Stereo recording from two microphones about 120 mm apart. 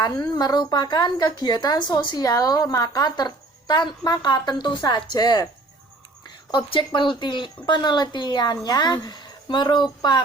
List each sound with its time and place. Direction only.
0.0 s speech: 35° left (ahead or behind)
6.5 s speech: 40° left (ahead or behind)